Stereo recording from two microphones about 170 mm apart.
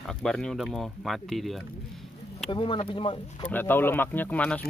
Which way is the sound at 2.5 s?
30° left (ahead or behind).